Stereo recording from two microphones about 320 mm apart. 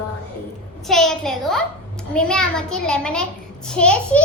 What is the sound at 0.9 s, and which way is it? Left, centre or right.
A child's voice, centre.